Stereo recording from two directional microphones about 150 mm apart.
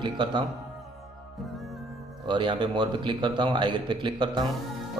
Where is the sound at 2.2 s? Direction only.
30° right (ahead or behind).